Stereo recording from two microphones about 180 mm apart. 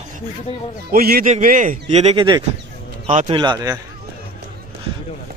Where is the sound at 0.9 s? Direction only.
55° right (ahead or behind); by 3.8 s 20° right (ahead or behind).